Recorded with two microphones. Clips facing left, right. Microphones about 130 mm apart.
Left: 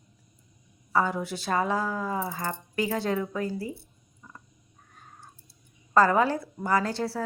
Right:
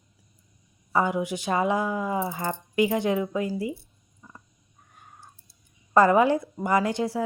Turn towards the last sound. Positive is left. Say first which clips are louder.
# right 3 dB
turn(degrees=-15)  # may be behind; listen again after turning